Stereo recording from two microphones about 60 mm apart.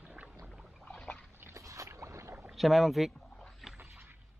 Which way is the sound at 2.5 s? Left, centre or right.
Centre.